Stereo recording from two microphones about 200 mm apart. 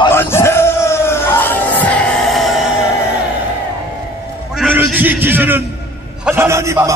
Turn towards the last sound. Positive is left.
turn(degrees=-15)  # may be behind; listen again after turning